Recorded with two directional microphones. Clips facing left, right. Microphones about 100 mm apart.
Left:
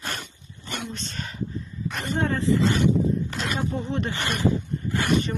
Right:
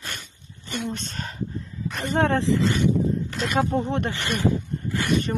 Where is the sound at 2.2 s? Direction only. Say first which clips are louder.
Right 3 dB; 85° right.